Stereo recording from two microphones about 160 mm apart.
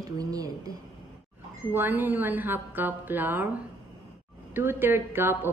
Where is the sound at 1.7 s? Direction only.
10° right (ahead or behind).